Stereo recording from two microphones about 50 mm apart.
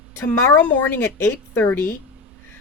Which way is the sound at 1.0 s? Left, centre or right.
Left.